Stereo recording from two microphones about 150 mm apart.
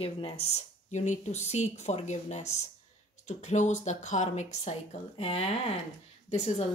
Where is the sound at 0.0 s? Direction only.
45° left (ahead or behind).